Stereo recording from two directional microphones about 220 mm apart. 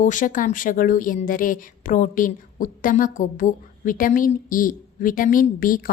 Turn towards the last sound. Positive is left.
turn(degrees=40)  # may be behind; listen again after turning